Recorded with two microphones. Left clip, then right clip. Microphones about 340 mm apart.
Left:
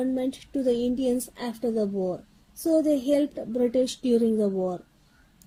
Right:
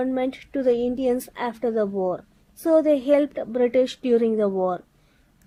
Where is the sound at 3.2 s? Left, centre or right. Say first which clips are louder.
Right 4 dB; right.